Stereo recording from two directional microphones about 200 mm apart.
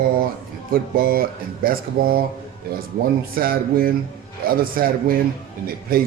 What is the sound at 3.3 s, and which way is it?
A man's voice, 45° right (ahead or behind).